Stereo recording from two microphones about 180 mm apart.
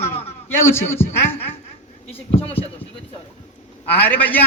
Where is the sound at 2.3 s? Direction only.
30° left (ahead or behind).